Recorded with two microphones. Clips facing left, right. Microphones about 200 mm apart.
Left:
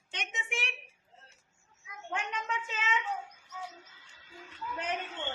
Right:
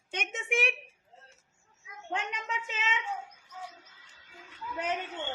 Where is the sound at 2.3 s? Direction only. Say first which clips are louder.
Left 1 dB; 20° right (ahead or behind).